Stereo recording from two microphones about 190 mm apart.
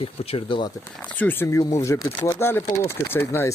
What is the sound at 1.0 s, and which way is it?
Speech, 10° left (ahead or behind).